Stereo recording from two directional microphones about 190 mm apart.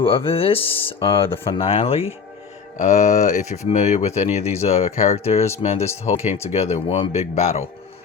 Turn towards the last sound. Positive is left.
turn(degrees=35)  # may be behind; listen again after turning